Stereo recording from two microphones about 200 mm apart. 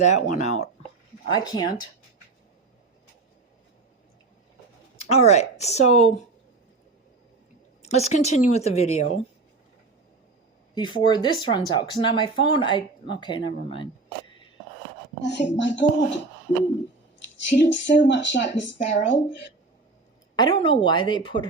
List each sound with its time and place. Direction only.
0.0 s speech: 35° left (ahead or behind)
1.3 s speech: 20° left (ahead or behind)
5.0 s speech: 35° left (ahead or behind)
7.8 s speech: 35° left (ahead or behind)
10.8 s speech: 25° left (ahead or behind)
15.2 s speech: 60° left (ahead or behind)
17.5 s speech: 65° left (ahead or behind)
20.3 s speech: 20° left (ahead or behind)